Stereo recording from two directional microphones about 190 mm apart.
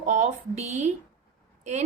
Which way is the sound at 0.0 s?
40° right (ahead or behind).